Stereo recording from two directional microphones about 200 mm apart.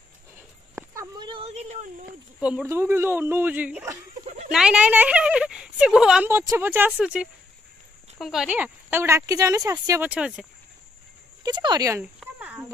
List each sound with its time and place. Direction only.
0.7 s a sound: 15° right (ahead or behind); by 1.9 s 35° right (ahead or behind)
2.4 s speech: 10° right (ahead or behind)
11.4 s speech: 20° right (ahead or behind)
12.2 s cricket: 5° right (ahead or behind)